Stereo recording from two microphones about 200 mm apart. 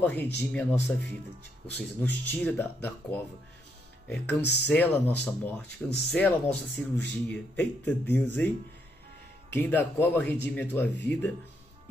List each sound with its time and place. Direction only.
0.0 s speech: 10° left (ahead or behind)
4.4 s speech: 55° left (ahead or behind)
4.6 s speech: 10° left (ahead or behind)
9.5 s speech: 10° left (ahead or behind)